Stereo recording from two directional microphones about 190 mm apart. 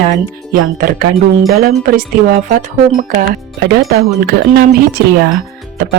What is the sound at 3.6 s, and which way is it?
Speech, 55° right (ahead or behind).